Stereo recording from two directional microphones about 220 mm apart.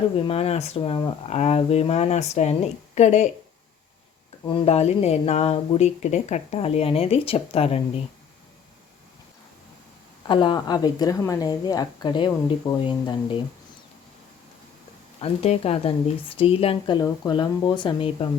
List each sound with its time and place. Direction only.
0.3 s speech: 25° left (ahead or behind)
4.4 s speech: 25° left (ahead or behind)
10.2 s a woman's voice: 20° left (ahead or behind)
15.2 s speech: 25° left (ahead or behind)